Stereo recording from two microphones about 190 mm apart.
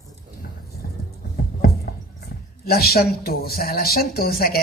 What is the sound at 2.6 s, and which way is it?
Speech, 55° left (ahead or behind).